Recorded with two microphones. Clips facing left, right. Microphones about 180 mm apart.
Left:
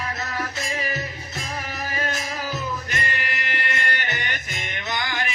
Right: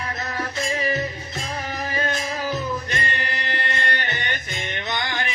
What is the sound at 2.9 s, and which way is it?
Music, 30° right (ahead or behind).